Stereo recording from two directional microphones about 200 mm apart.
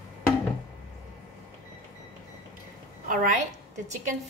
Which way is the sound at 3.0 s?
40° right (ahead or behind).